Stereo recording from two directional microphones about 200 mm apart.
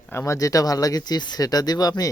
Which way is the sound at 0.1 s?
15° left (ahead or behind).